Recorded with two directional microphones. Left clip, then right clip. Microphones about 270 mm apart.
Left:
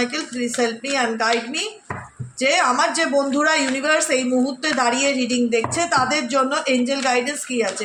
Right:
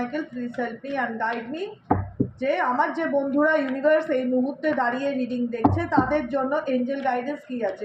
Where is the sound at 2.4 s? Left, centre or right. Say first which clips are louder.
Left 6 dB; left.